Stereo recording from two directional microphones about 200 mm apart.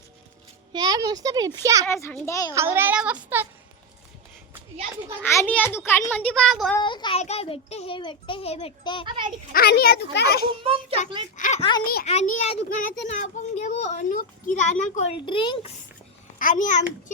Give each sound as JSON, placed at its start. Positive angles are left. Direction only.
{"t": 0.7, "sound": "a child's voice", "side_deg": -20}
{"t": 1.9, "sound": "a child's voice", "side_deg": 15}
{"t": 2.6, "sound": "speech", "side_deg": -10}
{"t": 5.2, "sound": "a child's voice", "side_deg": 10}
{"t": 6.8, "sound": "a child's voice", "side_deg": 25}
{"t": 9.0, "sound": "a child's voice", "side_deg": -25}
{"t": 9.5, "sound": "a child's voice", "side_deg": 50}
{"t": 10.6, "sound": "a child's voice", "side_deg": -25}
{"t": 11.3, "sound": "a child's voice", "side_deg": 40}
{"t": 15.3, "sound": "a child's voice", "side_deg": 25}
{"t": 16.4, "sound": "a child's voice", "side_deg": 40}